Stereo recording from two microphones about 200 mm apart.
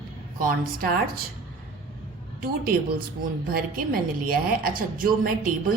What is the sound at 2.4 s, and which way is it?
A woman's voice, 50° right (ahead or behind).